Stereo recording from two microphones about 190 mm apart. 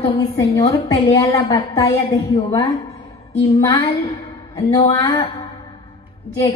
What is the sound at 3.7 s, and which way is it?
A woman's voice, 20° left (ahead or behind).